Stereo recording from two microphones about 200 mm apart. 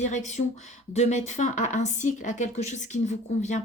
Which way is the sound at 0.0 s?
35° left (ahead or behind).